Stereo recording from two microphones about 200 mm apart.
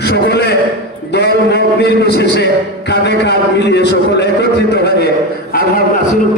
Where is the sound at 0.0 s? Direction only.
55° left (ahead or behind).